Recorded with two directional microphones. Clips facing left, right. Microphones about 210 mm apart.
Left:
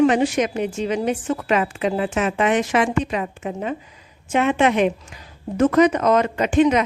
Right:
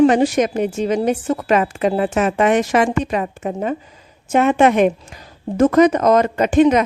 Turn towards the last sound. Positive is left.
turn(degrees=-45)  # may be behind; listen again after turning